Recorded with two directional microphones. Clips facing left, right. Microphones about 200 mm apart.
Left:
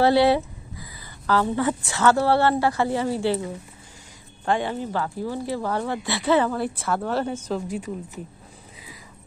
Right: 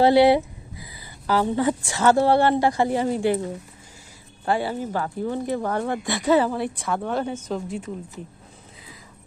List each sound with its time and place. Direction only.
0.0 s a woman's voice: 15° right (ahead or behind)
4.7 s speech: 40° right (ahead or behind)
6.6 s speech: 5° left (ahead or behind)